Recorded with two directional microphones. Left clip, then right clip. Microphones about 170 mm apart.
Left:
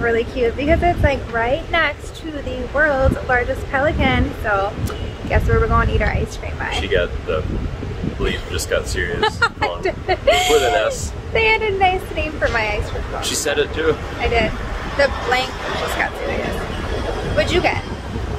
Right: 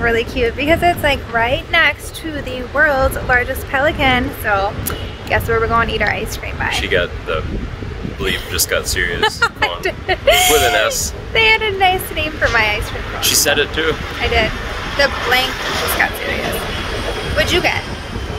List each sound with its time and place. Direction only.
0.0 s a woman's voice: 5° right (ahead or behind)
6.8 s speech: 25° left (ahead or behind)
8.5 s speech: 25° left (ahead or behind)
9.2 s speech: 5° right (ahead or behind)
13.2 s speech: 30° left (ahead or behind)
14.2 s a woman's voice: 5° right (ahead or behind)
17.4 s speech: 10° right (ahead or behind)